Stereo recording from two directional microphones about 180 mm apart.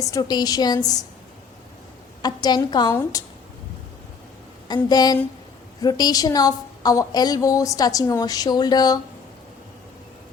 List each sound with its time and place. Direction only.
0.0 s a woman's voice: 20° left (ahead or behind)
2.2 s a woman's voice: 20° left (ahead or behind)
4.7 s a woman's voice: 20° left (ahead or behind)